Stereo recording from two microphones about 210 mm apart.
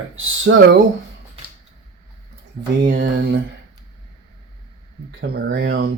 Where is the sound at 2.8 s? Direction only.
55° right (ahead or behind).